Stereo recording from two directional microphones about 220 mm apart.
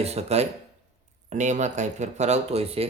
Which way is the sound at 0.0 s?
30° right (ahead or behind).